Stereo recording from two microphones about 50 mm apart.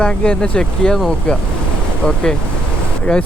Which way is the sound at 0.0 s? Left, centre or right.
Left.